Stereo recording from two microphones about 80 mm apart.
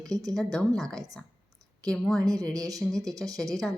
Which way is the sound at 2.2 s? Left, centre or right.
Right.